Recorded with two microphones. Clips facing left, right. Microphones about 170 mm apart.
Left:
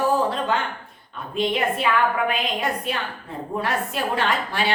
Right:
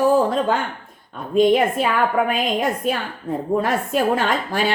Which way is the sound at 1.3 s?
45° right (ahead or behind).